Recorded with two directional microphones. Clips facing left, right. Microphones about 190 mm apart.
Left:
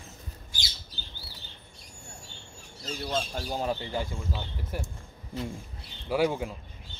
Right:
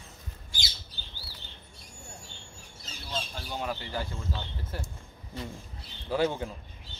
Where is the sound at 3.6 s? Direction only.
20° left (ahead or behind).